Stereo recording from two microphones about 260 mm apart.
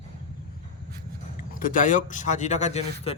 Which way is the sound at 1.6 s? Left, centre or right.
Left.